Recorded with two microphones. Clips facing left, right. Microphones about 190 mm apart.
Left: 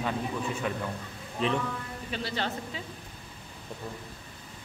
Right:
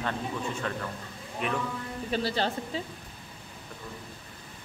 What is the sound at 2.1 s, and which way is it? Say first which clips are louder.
Speech: right 4 dB; 35° right (ahead or behind).